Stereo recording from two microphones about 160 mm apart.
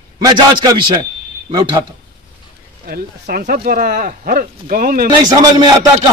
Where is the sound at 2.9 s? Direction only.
65° right (ahead or behind).